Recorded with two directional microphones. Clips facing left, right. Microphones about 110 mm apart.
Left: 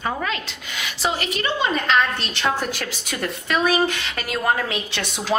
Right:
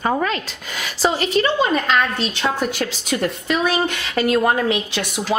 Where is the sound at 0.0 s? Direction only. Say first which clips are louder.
Right 5 dB; 40° right (ahead or behind).